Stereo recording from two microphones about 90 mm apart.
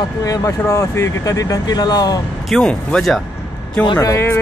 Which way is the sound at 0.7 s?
35° left (ahead or behind).